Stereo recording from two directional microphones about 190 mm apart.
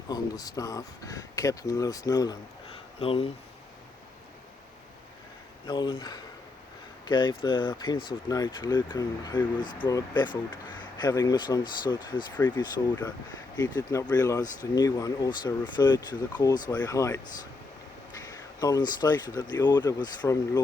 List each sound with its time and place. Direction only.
0.1 s speech: 20° left (ahead or behind)
3.0 s speech: 30° left (ahead or behind)
5.6 s speech: 25° left (ahead or behind)
13.6 s speech: 20° left (ahead or behind)
18.3 s speech: 20° left (ahead or behind)